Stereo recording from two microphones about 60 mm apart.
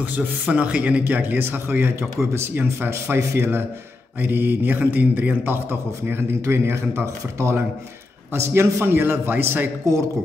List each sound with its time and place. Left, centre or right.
0.0 s speech: right
1.4 s a man's voice: right
8.8 s a man's voice: right